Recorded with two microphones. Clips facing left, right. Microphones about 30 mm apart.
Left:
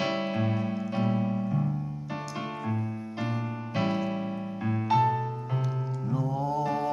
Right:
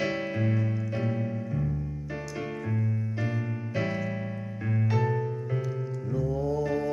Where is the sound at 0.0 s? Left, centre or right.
Left.